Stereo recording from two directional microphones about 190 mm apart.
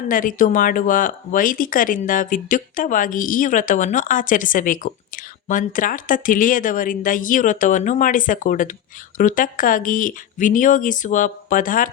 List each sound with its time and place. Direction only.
0.1 s speech: 45° left (ahead or behind)